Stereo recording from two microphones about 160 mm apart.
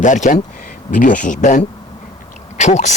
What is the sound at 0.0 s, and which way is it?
Speech, 50° left (ahead or behind).